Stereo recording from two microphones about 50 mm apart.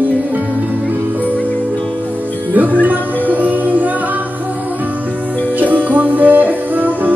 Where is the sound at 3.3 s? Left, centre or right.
Right.